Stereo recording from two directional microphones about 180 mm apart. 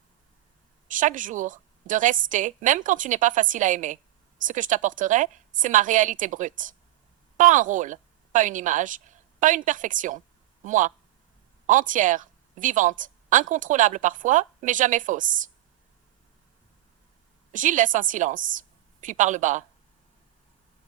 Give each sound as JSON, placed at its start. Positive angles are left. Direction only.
{"t": 0.9, "sound": "a woman's voice", "side_deg": -45}
{"t": 17.5, "sound": "a woman's voice", "side_deg": -45}